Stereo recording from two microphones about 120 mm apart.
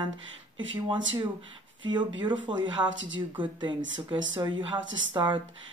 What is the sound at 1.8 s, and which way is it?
Speech, 40° right (ahead or behind).